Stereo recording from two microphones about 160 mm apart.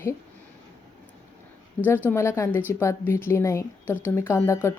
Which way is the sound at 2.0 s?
15° left (ahead or behind).